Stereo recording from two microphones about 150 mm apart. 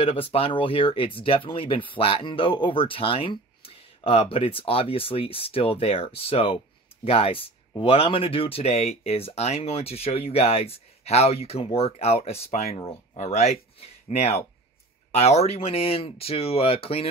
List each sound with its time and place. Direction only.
0.0 s speech: 40° left (ahead or behind)